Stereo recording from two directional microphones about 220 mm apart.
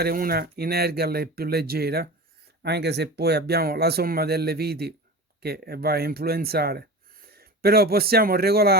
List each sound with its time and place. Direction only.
0.0 s speech: 45° right (ahead or behind)